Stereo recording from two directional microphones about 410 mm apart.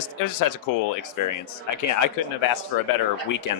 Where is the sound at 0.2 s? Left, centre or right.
Left.